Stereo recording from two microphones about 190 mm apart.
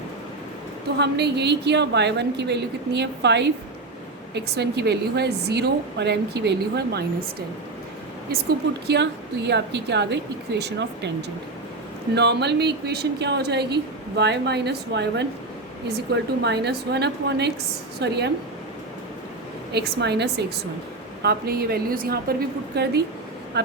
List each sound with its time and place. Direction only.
0.9 s speech: 60° right (ahead or behind)
8.9 s speech: 65° right (ahead or behind)
12.1 s speech: 60° right (ahead or behind)
16.4 s speech: 60° right (ahead or behind)
19.7 s a woman's voice: 60° right (ahead or behind)